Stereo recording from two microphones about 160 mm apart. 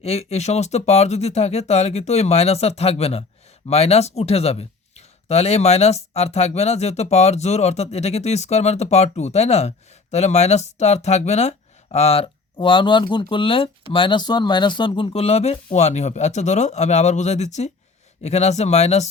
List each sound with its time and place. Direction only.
0.0 s speech: 40° left (ahead or behind)